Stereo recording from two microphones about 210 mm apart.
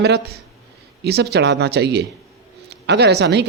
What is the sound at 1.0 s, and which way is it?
Speech, 50° right (ahead or behind).